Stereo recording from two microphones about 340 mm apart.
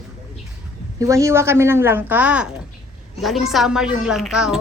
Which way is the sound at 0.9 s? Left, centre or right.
Centre.